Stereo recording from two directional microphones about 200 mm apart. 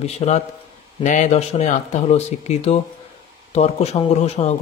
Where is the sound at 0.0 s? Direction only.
30° left (ahead or behind).